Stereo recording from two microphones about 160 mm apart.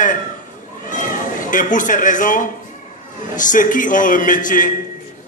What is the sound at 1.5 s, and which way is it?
Speech, 55° left (ahead or behind).